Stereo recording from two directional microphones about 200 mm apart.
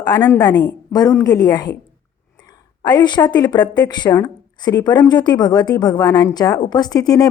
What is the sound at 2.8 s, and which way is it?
Speech, 20° left (ahead or behind).